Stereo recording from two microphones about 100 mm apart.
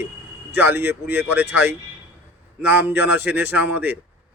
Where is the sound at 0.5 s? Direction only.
20° right (ahead or behind).